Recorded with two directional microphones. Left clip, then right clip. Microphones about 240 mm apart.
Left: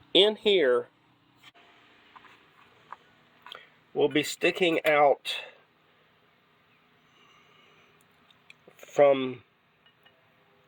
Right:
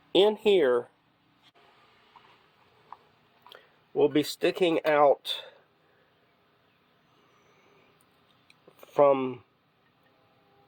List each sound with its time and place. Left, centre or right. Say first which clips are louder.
0.1 s speech: even; centre
3.9 s speech: right 1 dB; centre
8.7 s speech: left 1 dB; centre